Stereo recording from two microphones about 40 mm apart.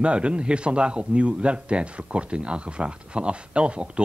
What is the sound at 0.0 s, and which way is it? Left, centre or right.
A man's voice, right.